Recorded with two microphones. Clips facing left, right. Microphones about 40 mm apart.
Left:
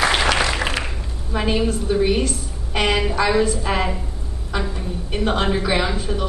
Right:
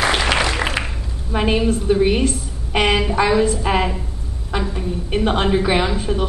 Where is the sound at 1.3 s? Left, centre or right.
Centre.